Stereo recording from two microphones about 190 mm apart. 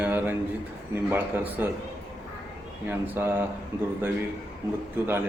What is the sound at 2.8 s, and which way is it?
Speech, 10° right (ahead or behind).